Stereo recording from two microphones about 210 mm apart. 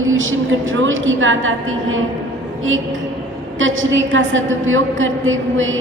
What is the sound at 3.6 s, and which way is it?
A woman's voice, 65° right (ahead or behind).